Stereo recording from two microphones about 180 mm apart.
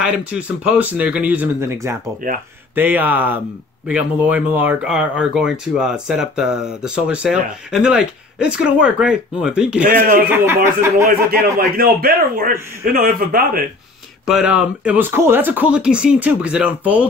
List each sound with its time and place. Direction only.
0.0 s speech: 5° right (ahead or behind)
2.2 s speech: 50° right (ahead or behind)
2.7 s speech: 10° right (ahead or behind)
9.8 s speech: 50° right (ahead or behind)
10.3 s speech: 15° right (ahead or behind)
11.1 s speech: 55° right (ahead or behind)
14.2 s speech: 5° right (ahead or behind)